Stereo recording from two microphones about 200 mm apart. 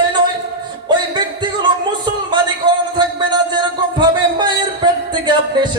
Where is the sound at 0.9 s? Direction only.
20° right (ahead or behind).